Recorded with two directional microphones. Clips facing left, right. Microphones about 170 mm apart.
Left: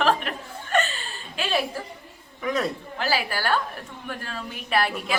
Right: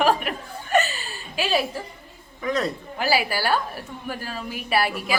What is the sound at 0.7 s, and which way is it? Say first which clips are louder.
Chuckle: right 3 dB; 5° right (ahead or behind).